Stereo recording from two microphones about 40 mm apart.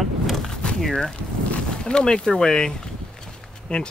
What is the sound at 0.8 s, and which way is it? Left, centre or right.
Speech, centre.